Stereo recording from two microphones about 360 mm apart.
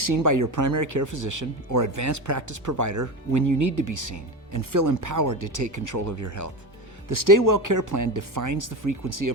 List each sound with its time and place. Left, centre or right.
0.0 s speech: right